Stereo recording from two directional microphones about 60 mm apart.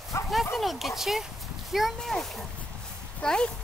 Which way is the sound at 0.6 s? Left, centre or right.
Centre.